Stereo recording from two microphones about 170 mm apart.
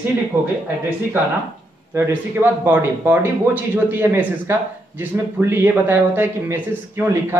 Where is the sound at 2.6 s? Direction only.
10° right (ahead or behind).